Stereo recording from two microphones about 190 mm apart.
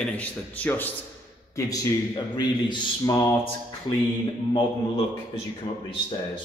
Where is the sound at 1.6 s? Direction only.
20° left (ahead or behind).